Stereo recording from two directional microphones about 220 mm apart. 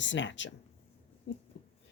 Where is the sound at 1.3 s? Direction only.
55° left (ahead or behind).